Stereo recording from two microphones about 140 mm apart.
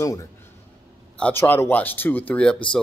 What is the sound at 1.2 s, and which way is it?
Speech, 10° left (ahead or behind).